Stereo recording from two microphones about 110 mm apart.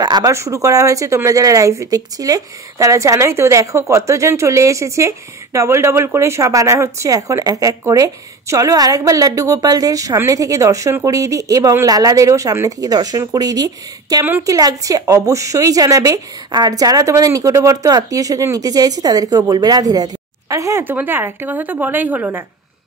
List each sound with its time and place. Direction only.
0.0 s speech: 40° right (ahead or behind)
0.3 s a woman's voice: 25° right (ahead or behind)
20.8 s a woman's voice: 20° right (ahead or behind)